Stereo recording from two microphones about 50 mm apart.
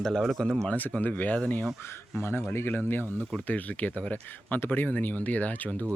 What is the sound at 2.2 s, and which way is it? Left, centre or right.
Speech, left.